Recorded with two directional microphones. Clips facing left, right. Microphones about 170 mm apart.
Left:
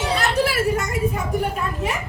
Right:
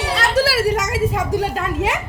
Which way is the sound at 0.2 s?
90° right.